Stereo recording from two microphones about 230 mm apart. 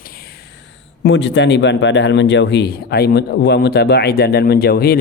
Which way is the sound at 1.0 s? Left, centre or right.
Left.